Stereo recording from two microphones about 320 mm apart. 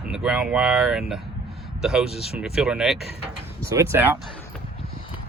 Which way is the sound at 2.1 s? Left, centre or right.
Centre.